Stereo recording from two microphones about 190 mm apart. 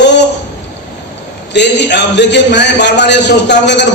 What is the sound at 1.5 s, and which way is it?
A man's voice, 65° left (ahead or behind).